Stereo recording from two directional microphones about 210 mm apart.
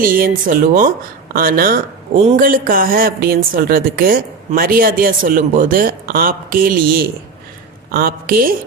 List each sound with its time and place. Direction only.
0.0 s a woman's voice: 40° right (ahead or behind)